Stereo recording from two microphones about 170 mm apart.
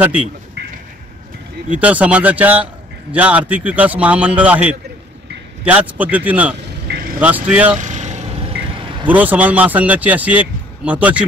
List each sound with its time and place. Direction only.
1.8 s a man's voice: 10° right (ahead or behind)
7.7 s vehicle: 45° right (ahead or behind)
9.0 s a man's voice: 10° right (ahead or behind)